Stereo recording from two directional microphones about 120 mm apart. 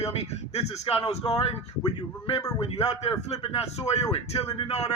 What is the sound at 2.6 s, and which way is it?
Speech, 55° left (ahead or behind).